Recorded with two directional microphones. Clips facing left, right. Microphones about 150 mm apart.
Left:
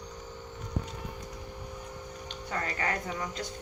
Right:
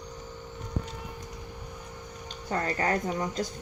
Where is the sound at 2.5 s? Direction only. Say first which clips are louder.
Right 5 dB; 35° right (ahead or behind).